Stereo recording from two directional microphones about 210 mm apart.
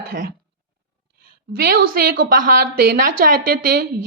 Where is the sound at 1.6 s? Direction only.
45° right (ahead or behind).